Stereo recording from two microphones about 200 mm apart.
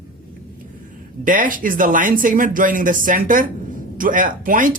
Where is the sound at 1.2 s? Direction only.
40° right (ahead or behind).